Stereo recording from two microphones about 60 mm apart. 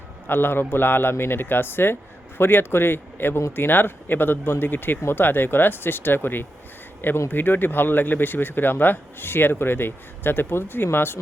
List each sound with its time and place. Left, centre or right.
0.3 s speech: left